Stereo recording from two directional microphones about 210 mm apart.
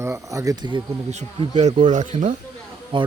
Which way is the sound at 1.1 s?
35° right (ahead or behind).